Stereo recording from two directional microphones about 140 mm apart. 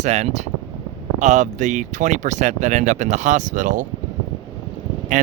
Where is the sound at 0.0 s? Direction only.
55° right (ahead or behind).